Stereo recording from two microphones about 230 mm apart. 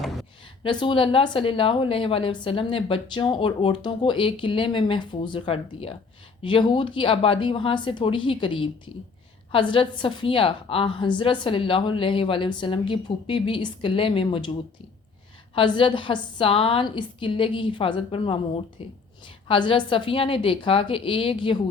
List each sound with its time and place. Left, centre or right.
0.0 s a sound: centre
0.6 s speech: left
15.5 s speech: left